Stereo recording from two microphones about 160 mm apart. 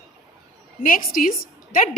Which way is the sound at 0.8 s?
60° left (ahead or behind).